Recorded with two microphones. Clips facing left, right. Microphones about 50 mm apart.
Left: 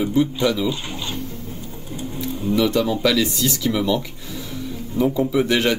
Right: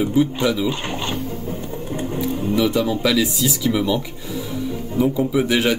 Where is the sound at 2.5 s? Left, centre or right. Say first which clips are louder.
Left 1 dB; centre.